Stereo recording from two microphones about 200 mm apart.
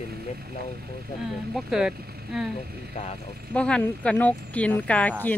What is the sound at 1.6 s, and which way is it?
Speech, 5° right (ahead or behind).